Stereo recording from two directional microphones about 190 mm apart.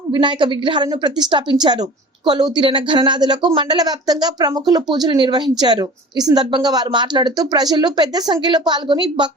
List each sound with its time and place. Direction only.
0.1 s speech: 25° right (ahead or behind)